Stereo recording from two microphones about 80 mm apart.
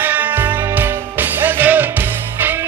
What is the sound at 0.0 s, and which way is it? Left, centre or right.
Music, right.